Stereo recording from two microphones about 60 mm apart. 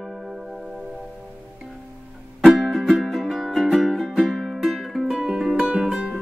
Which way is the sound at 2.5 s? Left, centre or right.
Centre.